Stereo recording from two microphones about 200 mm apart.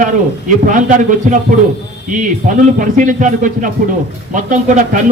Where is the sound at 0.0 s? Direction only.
40° right (ahead or behind).